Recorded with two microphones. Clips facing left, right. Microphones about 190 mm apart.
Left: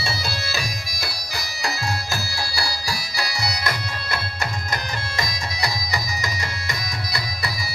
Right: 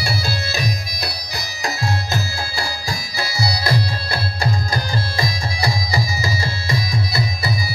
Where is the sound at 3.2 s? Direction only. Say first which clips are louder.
Right 5 dB; 30° right (ahead or behind).